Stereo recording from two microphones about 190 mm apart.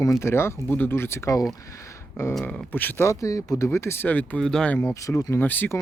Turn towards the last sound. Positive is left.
turn(degrees=10)  # may be behind; listen again after turning